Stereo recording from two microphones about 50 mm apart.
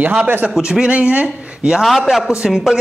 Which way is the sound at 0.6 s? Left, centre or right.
Centre.